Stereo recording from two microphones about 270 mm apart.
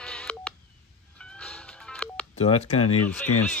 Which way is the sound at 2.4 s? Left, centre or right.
Left.